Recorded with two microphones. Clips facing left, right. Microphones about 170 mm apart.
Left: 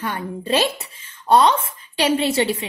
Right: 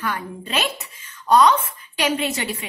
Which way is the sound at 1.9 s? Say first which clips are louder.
Left 5 dB; 30° left (ahead or behind).